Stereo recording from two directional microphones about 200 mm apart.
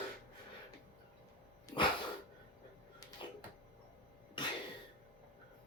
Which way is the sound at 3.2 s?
25° left (ahead or behind).